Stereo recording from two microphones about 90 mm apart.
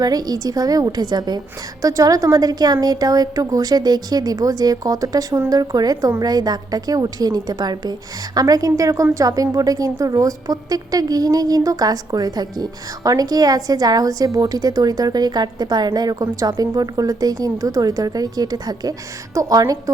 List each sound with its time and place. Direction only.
0.0 s a woman's voice: 45° right (ahead or behind)
1.8 s a woman's voice: 40° right (ahead or behind)